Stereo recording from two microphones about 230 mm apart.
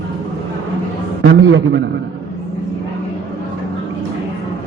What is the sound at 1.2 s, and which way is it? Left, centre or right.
Speech, right.